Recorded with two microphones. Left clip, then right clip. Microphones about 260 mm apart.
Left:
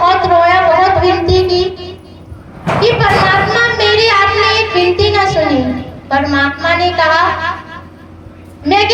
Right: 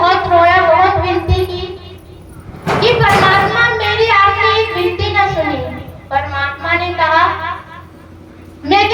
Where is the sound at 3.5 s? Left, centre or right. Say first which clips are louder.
Left 2 dB; left.